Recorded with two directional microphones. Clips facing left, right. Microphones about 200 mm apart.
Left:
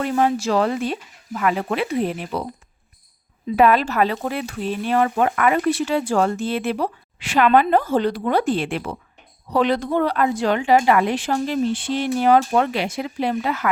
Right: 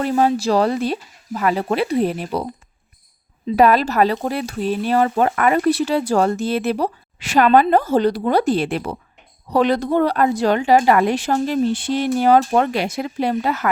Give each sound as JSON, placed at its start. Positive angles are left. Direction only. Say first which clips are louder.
{"t": 0.0, "sound": "speech", "louder": "right 2 dB", "side_deg": -35}
{"t": 3.5, "sound": "speech", "louder": "right 2 dB", "side_deg": -40}